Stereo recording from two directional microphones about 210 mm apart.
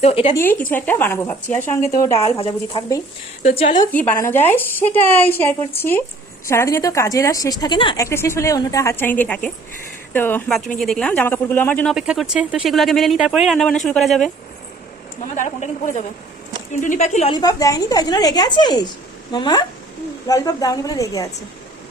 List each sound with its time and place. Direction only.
0.0 s a woman's voice: 30° left (ahead or behind)
0.3 s a woman's voice: 10° left (ahead or behind); by 3.8 s 30° left (ahead or behind)
3.9 s a woman's voice: 10° left (ahead or behind)
15.4 s a woman's voice: 35° left (ahead or behind)
17.3 s a woman's voice: 15° left (ahead or behind)